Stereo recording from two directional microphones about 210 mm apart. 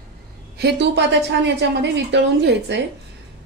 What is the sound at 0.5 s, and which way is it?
A woman's voice, 55° right (ahead or behind).